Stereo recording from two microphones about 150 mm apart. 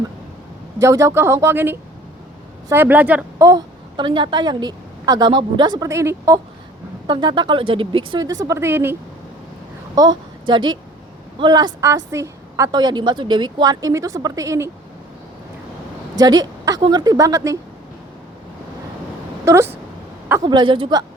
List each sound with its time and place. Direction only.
0.8 s a woman's voice: 20° right (ahead or behind)
3.9 s a woman's voice: 30° right (ahead or behind)
5.9 s a woman's voice: 20° right (ahead or behind)
7.1 s speech: 30° right (ahead or behind)
8.2 s a woman's voice: 25° right (ahead or behind)
9.9 s a woman's voice: 25° right (ahead or behind)
16.1 s a woman's voice: 25° right (ahead or behind)
19.5 s speech: 20° right (ahead or behind)
20.4 s speech: 30° right (ahead or behind)